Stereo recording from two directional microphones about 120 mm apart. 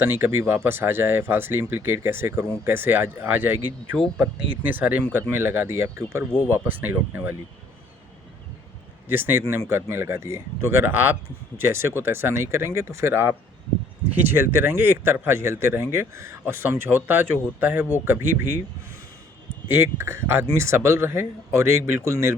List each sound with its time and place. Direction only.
0.0 s speech: 20° right (ahead or behind)
9.0 s speech: 20° right (ahead or behind)
19.6 s speech: 20° right (ahead or behind)